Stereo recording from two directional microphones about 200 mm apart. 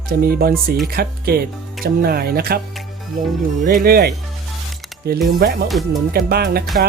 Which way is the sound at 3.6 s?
45° right (ahead or behind).